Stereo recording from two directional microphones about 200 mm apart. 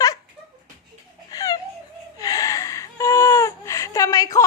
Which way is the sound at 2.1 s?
15° left (ahead or behind).